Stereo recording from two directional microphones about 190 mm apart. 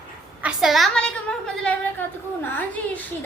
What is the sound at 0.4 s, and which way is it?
A woman's voice, centre (ahead or behind).